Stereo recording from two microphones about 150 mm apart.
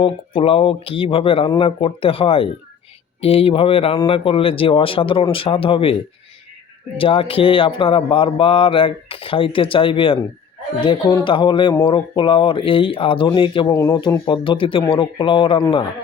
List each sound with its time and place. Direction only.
0.0 s speech: 40° left (ahead or behind)